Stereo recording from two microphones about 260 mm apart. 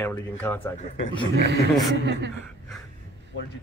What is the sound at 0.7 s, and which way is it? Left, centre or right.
Speech, left.